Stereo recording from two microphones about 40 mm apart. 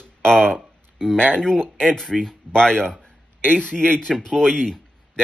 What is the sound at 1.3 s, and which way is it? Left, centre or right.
Speech, left.